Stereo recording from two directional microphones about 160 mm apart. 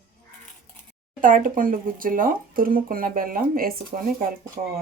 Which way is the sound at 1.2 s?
55° right (ahead or behind).